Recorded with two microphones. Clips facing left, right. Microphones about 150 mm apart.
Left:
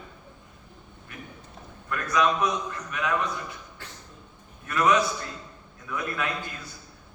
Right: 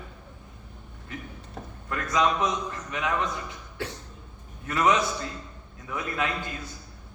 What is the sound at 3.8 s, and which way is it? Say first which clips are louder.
Cough: right 11 dB; 80° right.